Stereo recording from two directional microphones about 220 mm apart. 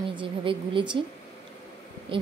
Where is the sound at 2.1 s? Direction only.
25° right (ahead or behind).